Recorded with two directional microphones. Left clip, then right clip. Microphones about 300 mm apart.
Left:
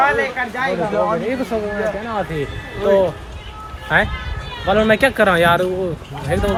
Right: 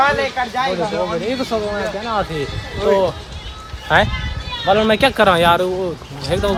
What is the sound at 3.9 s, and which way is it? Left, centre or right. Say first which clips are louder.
Speech: right 2 dB; centre.